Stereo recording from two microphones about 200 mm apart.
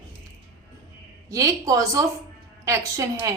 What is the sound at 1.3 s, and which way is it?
A woman's voice, 15° right (ahead or behind).